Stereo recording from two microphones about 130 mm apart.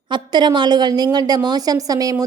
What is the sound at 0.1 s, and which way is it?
A woman's voice, 35° right (ahead or behind).